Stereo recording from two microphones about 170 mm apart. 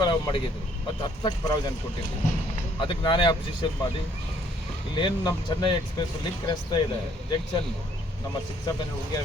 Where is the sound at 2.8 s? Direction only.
25° left (ahead or behind).